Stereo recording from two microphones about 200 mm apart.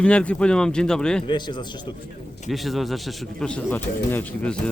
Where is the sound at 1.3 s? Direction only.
20° left (ahead or behind).